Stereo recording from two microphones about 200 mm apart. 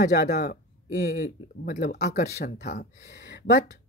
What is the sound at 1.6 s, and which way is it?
Speech, 40° left (ahead or behind).